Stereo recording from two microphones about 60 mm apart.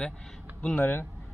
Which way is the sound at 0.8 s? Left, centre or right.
Left.